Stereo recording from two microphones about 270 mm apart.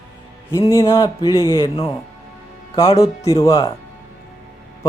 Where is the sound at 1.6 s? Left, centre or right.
Left.